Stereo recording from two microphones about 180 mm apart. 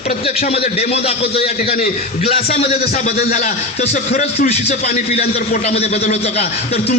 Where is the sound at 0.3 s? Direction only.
35° left (ahead or behind).